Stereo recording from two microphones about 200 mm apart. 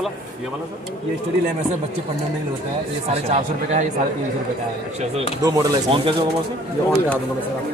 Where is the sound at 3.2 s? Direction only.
35° right (ahead or behind).